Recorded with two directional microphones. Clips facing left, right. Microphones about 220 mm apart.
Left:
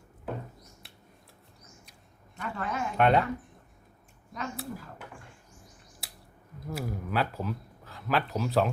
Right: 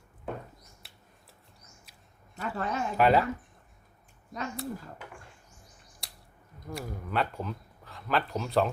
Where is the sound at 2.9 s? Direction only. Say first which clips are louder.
Even; 5° right (ahead or behind).